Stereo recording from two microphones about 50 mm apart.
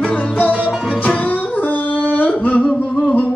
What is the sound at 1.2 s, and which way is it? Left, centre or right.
Music, left.